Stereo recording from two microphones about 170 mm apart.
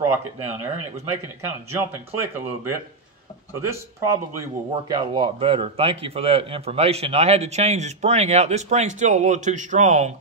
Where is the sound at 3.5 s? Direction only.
15° right (ahead or behind).